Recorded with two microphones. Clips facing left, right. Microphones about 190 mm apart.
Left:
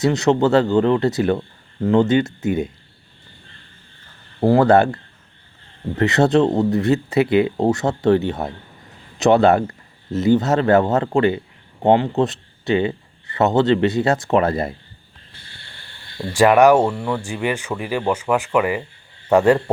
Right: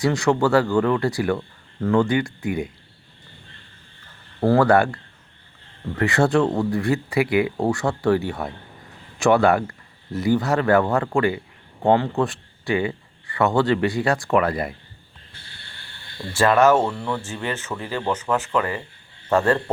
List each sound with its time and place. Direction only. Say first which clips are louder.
0.0 s speech: left 3 dB; 20° left (ahead or behind)
4.4 s a man's voice: left 3 dB; 20° left (ahead or behind)
16.3 s speech: left 4 dB; 15° left (ahead or behind)